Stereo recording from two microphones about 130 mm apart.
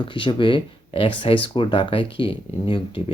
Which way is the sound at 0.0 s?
40° left (ahead or behind).